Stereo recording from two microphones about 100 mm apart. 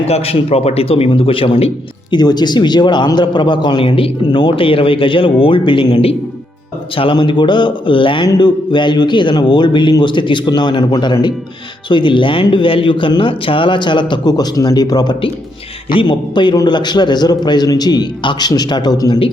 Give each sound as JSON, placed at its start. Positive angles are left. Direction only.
{"t": 0.1, "sound": "a man's voice", "side_deg": 80}
{"t": 2.0, "sound": "a man's voice", "side_deg": 45}
{"t": 15.9, "sound": "a man's voice", "side_deg": 55}